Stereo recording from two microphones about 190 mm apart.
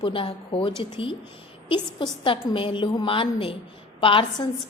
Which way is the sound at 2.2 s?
25° left (ahead or behind).